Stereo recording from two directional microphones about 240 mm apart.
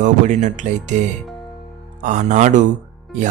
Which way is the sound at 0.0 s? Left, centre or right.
Right.